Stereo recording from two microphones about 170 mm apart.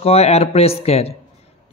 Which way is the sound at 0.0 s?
35° left (ahead or behind).